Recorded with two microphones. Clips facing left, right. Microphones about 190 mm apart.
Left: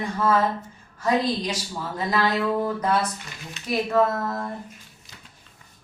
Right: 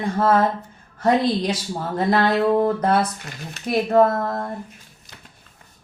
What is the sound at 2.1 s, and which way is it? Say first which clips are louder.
Music: right 5 dB; 30° right (ahead or behind).